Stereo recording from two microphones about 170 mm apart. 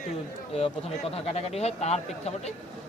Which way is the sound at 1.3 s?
40° left (ahead or behind).